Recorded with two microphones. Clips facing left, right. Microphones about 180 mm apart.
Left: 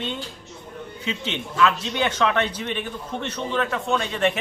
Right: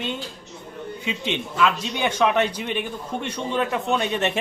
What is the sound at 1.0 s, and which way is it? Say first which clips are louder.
A man's voice: right 1 dB; 10° right (ahead or behind).